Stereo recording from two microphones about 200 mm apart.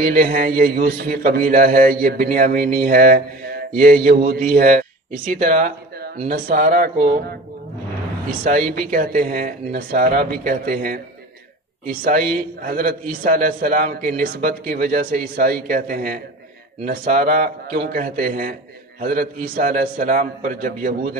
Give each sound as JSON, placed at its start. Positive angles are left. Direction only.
{"t": 0.0, "sound": "a man's voice", "side_deg": -45}
{"t": 5.4, "sound": "a sound", "side_deg": -40}
{"t": 6.1, "sound": "a man's voice", "side_deg": -40}
{"t": 8.5, "sound": "a man's voice", "side_deg": -40}